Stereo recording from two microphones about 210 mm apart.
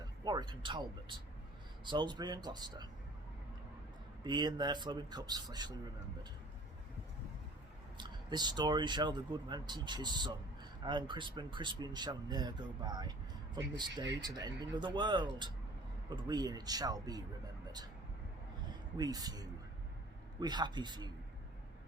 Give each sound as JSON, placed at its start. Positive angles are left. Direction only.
{"t": 0.0, "sound": "speech", "side_deg": -20}
{"t": 4.2, "sound": "speech", "side_deg": -20}
{"t": 7.9, "sound": "a man's voice", "side_deg": -20}
{"t": 18.9, "sound": "a man's voice", "side_deg": -20}